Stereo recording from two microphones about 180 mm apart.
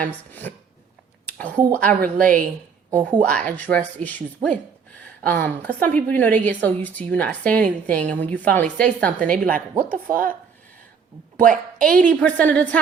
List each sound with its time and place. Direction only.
0.0 s a woman's voice: 10° left (ahead or behind)
1.5 s a woman's voice: 10° right (ahead or behind)
1.8 s a woman's voice: 10° left (ahead or behind)
2.1 s speech: 50° right (ahead or behind)
2.9 s a woman's voice: 5° left (ahead or behind)
5.2 s a woman's voice: 10° left (ahead or behind)
9.5 s speech: 50° right (ahead or behind)
11.3 s a woman's voice: 50° right (ahead or behind)
11.9 s a woman's voice: 5° left (ahead or behind)